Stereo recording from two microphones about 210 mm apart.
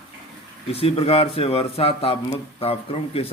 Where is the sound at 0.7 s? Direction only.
30° left (ahead or behind).